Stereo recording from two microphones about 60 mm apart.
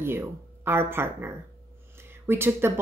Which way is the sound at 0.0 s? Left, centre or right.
Right.